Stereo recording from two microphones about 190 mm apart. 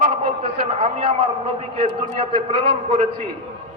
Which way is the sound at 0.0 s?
35° right (ahead or behind).